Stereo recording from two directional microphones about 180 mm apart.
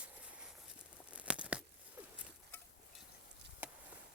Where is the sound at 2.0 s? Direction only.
10° right (ahead or behind).